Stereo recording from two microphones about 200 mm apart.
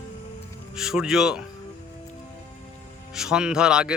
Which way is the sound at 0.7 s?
Centre (ahead or behind).